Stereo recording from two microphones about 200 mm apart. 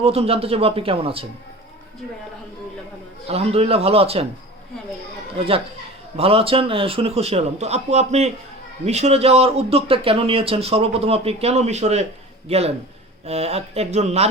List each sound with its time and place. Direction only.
0.0 s speech: 30° right (ahead or behind)
3.2 s speech: 30° right (ahead or behind)
6.1 s a man's voice: 30° right (ahead or behind)